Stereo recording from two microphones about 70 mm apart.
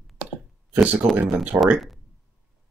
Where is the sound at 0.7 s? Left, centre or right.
Right.